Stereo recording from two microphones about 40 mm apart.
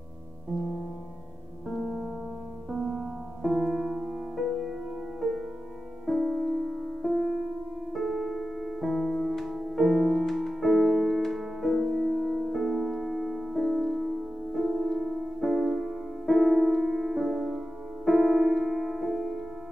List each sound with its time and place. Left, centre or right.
1.7 s music: centre
2.7 s music: centre
6.0 s music: centre